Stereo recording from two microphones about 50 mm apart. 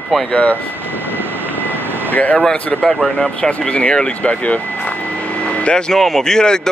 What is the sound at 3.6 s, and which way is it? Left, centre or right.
Speech, left.